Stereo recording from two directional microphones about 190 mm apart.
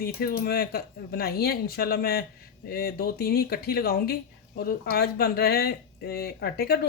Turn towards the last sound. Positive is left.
turn(degrees=55)  # may be behind; listen again after turning